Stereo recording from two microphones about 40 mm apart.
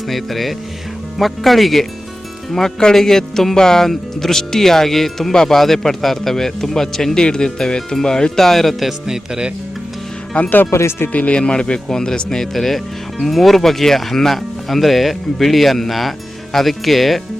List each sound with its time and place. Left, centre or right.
0.1 s speech: centre
2.5 s speech: centre
8.9 s speech: centre
11.1 s speech: left; by 17.2 s centre